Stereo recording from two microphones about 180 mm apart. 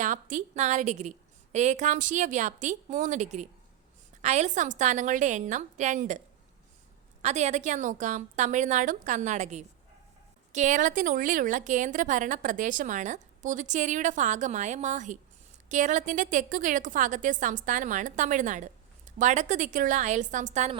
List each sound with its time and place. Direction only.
0.0 s a woman's voice: 45° right (ahead or behind)